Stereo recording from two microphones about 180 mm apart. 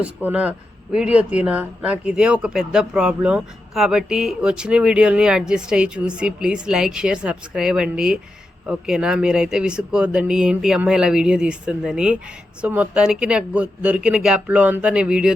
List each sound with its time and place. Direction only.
0.0 s a man's voice: 10° right (ahead or behind)